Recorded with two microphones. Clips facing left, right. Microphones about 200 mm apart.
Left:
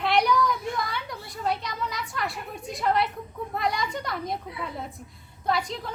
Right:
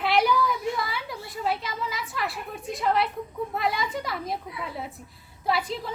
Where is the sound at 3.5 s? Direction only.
5° right (ahead or behind).